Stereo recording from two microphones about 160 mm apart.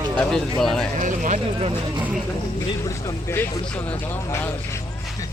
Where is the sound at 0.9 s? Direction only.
50° right (ahead or behind).